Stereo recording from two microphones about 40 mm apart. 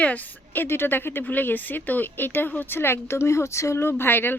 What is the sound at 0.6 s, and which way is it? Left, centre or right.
Speech, left.